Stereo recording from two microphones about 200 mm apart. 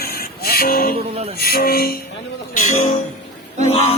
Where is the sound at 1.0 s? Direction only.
30° right (ahead or behind).